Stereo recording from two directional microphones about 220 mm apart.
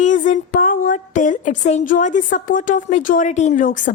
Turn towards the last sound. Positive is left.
turn(degrees=35)  # may be behind; listen again after turning